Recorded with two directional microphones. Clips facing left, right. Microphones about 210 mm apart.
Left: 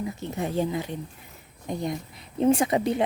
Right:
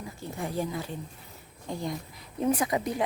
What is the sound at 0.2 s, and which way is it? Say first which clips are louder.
Speech: left 3 dB; 20° left (ahead or behind).